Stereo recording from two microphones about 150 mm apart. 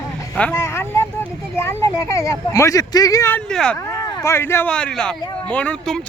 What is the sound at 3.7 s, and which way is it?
Speech, 20° left (ahead or behind).